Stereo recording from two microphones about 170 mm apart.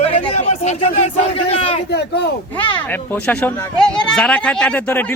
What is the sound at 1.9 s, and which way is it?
Speech, 75° left (ahead or behind).